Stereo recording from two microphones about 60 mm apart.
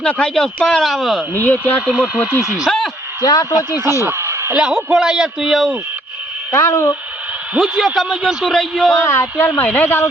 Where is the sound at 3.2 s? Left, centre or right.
Left.